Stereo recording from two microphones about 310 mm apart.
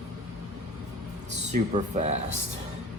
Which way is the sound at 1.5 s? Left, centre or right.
Right.